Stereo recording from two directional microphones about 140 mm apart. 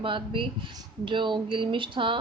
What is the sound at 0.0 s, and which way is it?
Speech, 35° right (ahead or behind).